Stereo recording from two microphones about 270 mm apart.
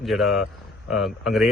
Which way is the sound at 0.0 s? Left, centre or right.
Centre.